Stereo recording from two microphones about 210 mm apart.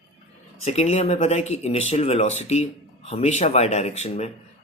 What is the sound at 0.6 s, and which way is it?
Speech, 30° left (ahead or behind).